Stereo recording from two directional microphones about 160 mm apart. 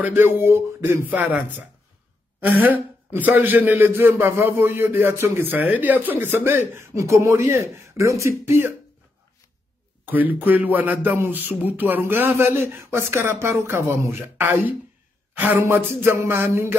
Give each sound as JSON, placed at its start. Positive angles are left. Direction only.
{"t": 0.0, "sound": "speech", "side_deg": -10}
{"t": 2.4, "sound": "speech", "side_deg": -10}
{"t": 10.0, "sound": "speech", "side_deg": -10}